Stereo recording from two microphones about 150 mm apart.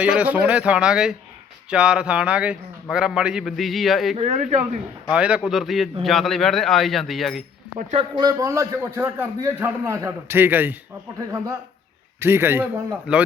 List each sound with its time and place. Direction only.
0.0 s a man's voice: 10° right (ahead or behind)
4.2 s speech: 50° right (ahead or behind)
5.1 s a man's voice: 5° right (ahead or behind)
7.9 s a man's voice: 30° right (ahead or behind); by 13.2 s 10° right (ahead or behind)